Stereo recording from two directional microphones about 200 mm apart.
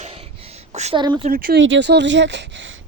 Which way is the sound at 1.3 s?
50° right (ahead or behind).